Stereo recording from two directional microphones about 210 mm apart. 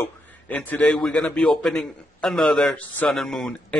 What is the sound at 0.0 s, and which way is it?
A man's voice, 10° left (ahead or behind).